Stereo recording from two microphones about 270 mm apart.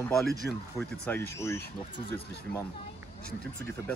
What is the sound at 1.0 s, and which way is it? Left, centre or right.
Speech, centre.